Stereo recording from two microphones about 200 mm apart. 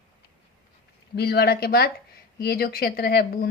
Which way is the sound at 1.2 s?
50° left (ahead or behind).